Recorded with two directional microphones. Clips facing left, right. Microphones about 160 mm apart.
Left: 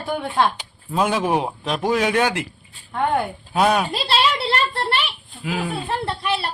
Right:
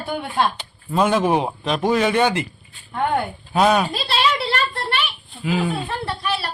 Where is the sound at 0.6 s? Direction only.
5° left (ahead or behind).